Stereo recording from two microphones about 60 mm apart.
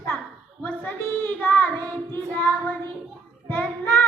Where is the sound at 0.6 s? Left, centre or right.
Left.